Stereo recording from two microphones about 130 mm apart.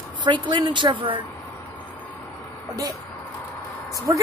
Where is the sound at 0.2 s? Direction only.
35° right (ahead or behind).